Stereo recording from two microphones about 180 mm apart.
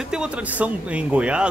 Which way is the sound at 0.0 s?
5° right (ahead or behind).